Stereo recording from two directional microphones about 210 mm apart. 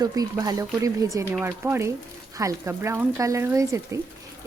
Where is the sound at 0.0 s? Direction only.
20° right (ahead or behind).